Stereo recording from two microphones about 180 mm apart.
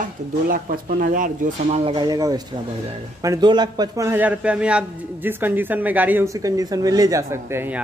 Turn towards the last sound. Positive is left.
turn(degrees=-15)  # may be behind; listen again after turning